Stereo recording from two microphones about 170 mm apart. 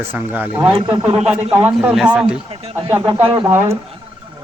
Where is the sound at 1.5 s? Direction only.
10° right (ahead or behind).